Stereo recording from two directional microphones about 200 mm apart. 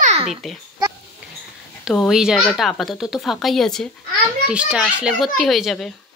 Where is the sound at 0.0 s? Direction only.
30° right (ahead or behind).